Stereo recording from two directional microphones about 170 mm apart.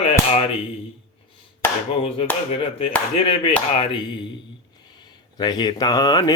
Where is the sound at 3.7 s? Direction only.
30° left (ahead or behind).